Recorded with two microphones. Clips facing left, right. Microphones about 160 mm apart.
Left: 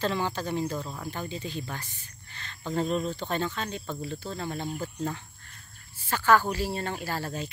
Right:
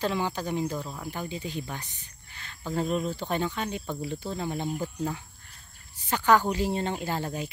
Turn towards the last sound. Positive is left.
turn(degrees=-15)  # may be behind; listen again after turning